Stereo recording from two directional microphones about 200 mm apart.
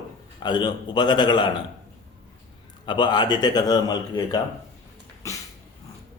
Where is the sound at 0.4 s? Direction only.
20° left (ahead or behind).